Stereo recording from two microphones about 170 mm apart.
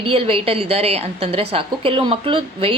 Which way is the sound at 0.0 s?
35° right (ahead or behind).